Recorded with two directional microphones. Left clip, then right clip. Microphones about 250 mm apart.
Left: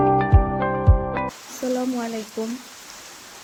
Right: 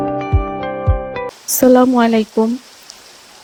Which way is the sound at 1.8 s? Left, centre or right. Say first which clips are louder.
Right 14 dB; right.